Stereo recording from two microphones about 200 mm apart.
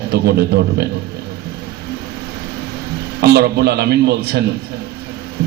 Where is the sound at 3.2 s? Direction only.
55° right (ahead or behind).